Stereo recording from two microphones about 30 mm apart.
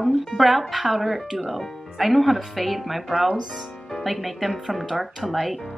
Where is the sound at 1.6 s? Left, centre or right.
Centre.